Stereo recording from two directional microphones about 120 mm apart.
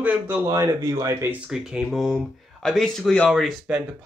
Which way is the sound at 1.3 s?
5° right (ahead or behind).